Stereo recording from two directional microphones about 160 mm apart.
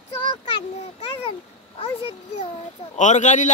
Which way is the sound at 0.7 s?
45° left (ahead or behind).